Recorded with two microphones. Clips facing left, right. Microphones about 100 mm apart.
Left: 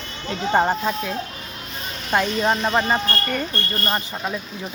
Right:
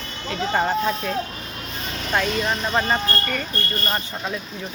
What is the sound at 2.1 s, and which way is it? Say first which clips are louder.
Speech: left 3 dB; 10° left (ahead or behind).